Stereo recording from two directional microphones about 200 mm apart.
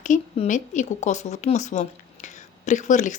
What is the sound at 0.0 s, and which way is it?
Speech, 40° left (ahead or behind).